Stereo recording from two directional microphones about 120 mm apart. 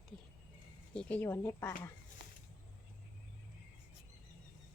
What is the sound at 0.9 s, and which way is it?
Speech, 15° left (ahead or behind).